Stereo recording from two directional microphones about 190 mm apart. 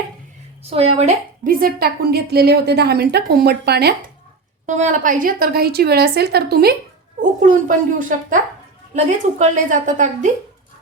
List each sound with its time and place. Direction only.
0.6 s a woman's voice: 30° right (ahead or behind)
1.5 s a woman's voice: 50° right (ahead or behind)
4.6 s a woman's voice: 40° right (ahead or behind)
7.2 s a woman's voice: 40° right (ahead or behind)